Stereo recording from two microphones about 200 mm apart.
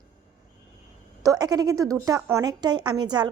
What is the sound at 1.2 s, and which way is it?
Speech, 20° right (ahead or behind).